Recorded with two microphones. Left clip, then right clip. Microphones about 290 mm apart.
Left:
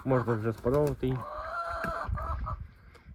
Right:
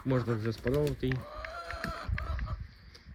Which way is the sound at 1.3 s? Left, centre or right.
Centre.